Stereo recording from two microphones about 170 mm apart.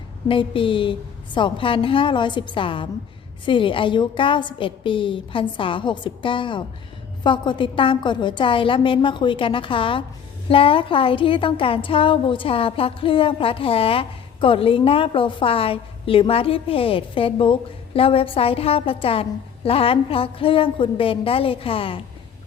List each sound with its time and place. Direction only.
0.3 s a woman's voice: 30° left (ahead or behind)